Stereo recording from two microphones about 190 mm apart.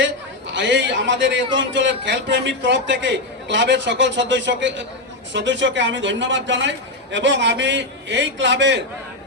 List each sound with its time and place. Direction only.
0.0 s a man's voice: 70° right (ahead or behind)